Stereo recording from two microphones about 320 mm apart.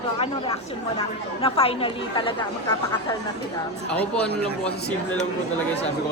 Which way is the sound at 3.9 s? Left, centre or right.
Centre.